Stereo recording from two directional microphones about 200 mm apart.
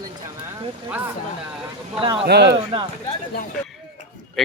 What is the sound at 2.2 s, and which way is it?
Speech, 55° right (ahead or behind).